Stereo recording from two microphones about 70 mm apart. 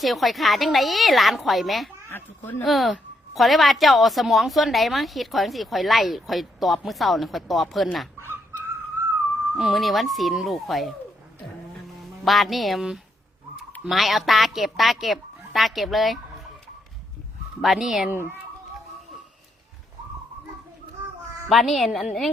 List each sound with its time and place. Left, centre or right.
0.0 s a woman's voice: centre
2.0 s speech: left
2.6 s a woman's voice: centre
9.6 s a woman's voice: centre
12.2 s a woman's voice: centre
17.6 s a woman's voice: centre
18.1 s a child's voice: right
21.5 s a woman's voice: centre